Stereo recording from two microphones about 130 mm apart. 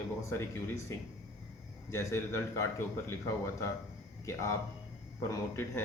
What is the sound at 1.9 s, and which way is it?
Speech, 20° left (ahead or behind).